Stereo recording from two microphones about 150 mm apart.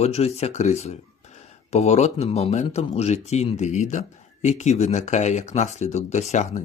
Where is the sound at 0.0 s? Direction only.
45° left (ahead or behind).